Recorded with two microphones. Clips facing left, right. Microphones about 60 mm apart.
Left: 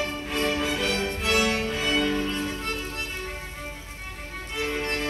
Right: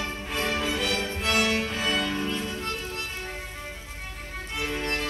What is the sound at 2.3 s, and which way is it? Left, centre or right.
Music, left.